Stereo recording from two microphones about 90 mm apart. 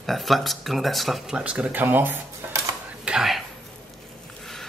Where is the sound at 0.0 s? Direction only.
Centre (ahead or behind).